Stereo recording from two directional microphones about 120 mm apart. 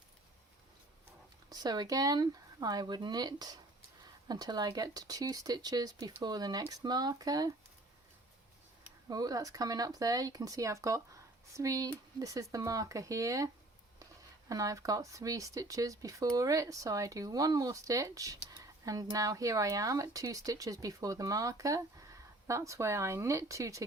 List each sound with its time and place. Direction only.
1.5 s speech: 35° right (ahead or behind)
9.0 s speech: 30° right (ahead or behind)
14.5 s speech: 30° right (ahead or behind)